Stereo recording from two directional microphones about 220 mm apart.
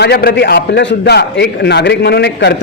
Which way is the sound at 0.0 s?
45° left (ahead or behind).